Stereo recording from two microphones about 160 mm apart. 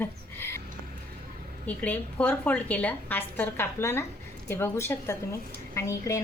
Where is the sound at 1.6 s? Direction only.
10° left (ahead or behind).